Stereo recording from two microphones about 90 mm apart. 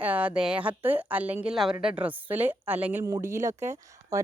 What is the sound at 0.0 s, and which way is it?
A woman's voice, 15° right (ahead or behind).